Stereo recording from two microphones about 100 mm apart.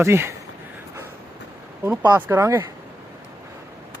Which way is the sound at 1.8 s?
20° right (ahead or behind).